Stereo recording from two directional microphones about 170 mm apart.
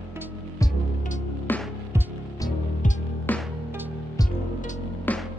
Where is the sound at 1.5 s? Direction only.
10° left (ahead or behind).